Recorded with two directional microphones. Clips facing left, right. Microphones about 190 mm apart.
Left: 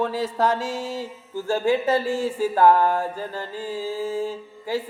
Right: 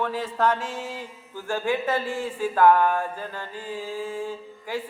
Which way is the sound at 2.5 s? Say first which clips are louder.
Even; 35° left (ahead or behind).